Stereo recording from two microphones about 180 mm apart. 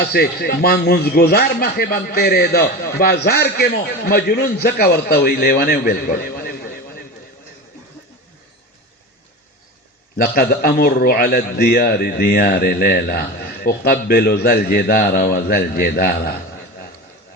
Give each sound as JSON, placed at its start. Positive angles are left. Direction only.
{"t": 0.0, "sound": "a man's voice", "side_deg": 60}
{"t": 10.2, "sound": "a man's voice", "side_deg": 60}